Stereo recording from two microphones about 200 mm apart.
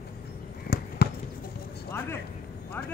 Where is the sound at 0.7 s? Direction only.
55° left (ahead or behind).